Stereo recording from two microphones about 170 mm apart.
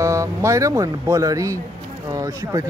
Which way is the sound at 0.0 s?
15° right (ahead or behind).